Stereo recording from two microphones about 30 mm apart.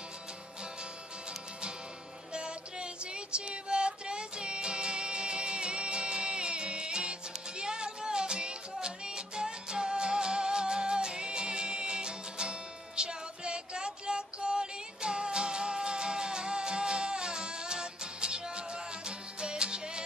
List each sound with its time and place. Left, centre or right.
2.3 s music: right